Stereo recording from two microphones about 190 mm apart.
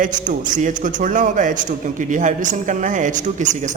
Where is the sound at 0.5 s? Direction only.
40° right (ahead or behind).